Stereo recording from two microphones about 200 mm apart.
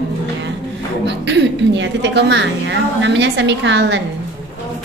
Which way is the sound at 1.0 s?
60° right (ahead or behind).